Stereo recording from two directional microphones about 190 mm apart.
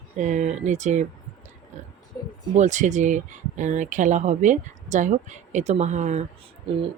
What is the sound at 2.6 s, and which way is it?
Speech, 40° right (ahead or behind).